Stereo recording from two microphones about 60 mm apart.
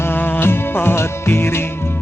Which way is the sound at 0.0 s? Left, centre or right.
Left.